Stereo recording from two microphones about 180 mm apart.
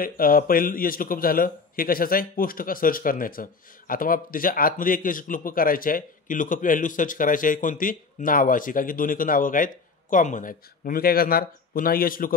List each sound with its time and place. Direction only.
0.0 s a man's voice: 50° left (ahead or behind)